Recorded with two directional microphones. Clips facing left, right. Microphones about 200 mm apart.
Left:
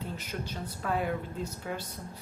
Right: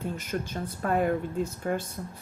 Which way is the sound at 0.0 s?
50° right (ahead or behind).